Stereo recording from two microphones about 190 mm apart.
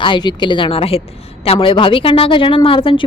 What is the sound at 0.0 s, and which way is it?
A woman's voice, 25° left (ahead or behind).